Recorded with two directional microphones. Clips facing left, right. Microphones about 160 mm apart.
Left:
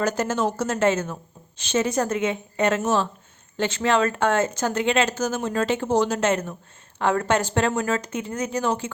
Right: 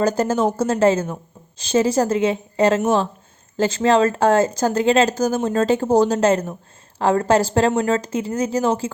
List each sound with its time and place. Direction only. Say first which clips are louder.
0.0 s speech: right 5 dB; 35° right (ahead or behind)